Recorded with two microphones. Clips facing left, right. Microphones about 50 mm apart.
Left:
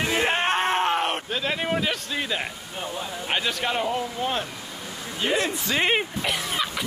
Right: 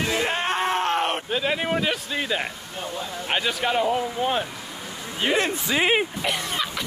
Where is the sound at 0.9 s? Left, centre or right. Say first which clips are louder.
Right 1 dB; centre.